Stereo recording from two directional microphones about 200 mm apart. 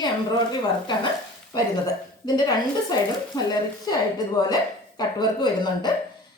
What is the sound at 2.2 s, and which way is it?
A woman's voice, 20° left (ahead or behind).